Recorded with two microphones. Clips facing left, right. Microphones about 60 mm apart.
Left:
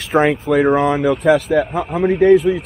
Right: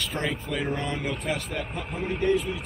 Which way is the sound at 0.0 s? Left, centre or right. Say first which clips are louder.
Left 15 dB; left.